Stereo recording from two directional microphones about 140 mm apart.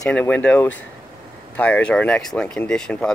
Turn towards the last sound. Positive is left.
turn(degrees=5)  # may be behind; listen again after turning